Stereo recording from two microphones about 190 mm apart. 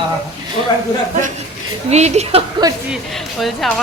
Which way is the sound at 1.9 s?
35° right (ahead or behind).